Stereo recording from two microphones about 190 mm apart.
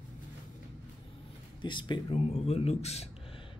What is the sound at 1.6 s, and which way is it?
Speech, 25° left (ahead or behind).